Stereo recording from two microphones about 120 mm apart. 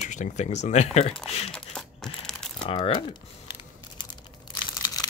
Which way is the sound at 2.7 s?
45° left (ahead or behind).